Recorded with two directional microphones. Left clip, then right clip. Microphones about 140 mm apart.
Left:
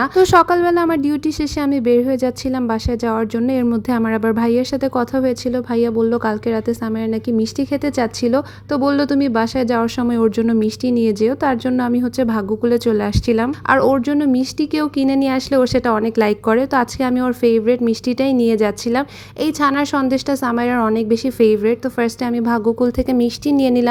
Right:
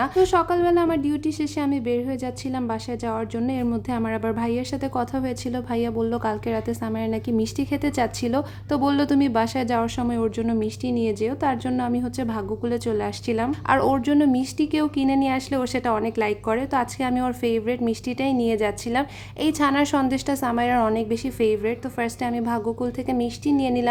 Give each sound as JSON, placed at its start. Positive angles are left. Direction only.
{"t": 0.0, "sound": "a woman's voice", "side_deg": 40}
{"t": 13.7, "sound": "a woman's voice", "side_deg": 25}